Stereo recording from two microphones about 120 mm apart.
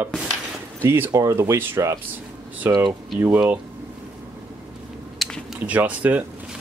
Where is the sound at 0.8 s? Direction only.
20° right (ahead or behind).